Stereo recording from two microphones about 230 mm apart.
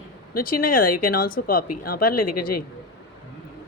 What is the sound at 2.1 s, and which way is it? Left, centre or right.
Speech, left.